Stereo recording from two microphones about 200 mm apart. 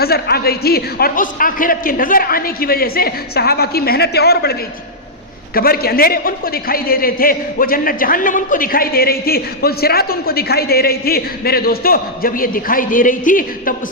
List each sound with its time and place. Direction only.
0.0 s a man's voice: 50° left (ahead or behind)
5.5 s a man's voice: 50° left (ahead or behind)